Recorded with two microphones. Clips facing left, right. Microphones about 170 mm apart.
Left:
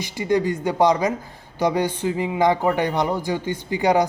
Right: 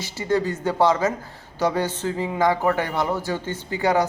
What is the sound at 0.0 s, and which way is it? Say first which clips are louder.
Speech: left 2 dB; 15° left (ahead or behind).